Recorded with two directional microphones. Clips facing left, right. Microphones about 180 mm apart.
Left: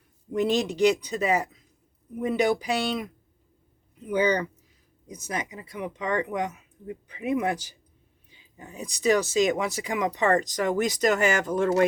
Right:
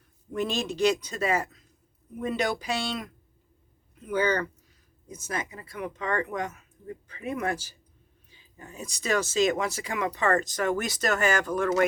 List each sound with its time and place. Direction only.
0.3 s speech: 20° left (ahead or behind)